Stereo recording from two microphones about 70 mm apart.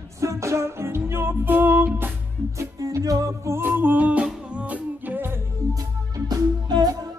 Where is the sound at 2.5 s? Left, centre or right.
Right.